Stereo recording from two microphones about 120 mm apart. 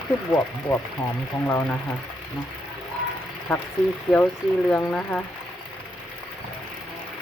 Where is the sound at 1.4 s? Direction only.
15° left (ahead or behind).